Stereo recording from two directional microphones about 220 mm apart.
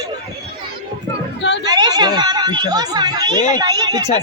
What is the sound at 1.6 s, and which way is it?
A woman's voice, 20° right (ahead or behind).